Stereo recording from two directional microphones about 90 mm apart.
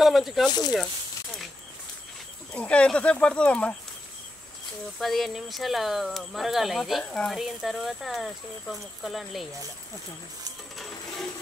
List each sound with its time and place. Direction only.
0.0 s speech: centre (ahead or behind)
0.5 s speech: 50° left (ahead or behind)
2.5 s speech: 15° left (ahead or behind)
5.0 s speech: centre (ahead or behind)